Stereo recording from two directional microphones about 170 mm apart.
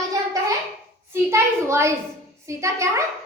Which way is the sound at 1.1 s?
15° right (ahead or behind).